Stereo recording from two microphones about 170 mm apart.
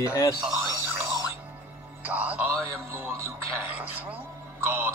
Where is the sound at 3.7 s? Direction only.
10° right (ahead or behind).